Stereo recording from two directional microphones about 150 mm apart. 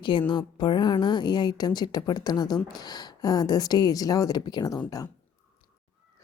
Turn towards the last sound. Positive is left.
turn(degrees=25)  # may be behind; listen again after turning